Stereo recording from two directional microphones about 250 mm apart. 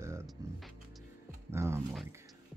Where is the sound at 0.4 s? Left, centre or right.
Centre.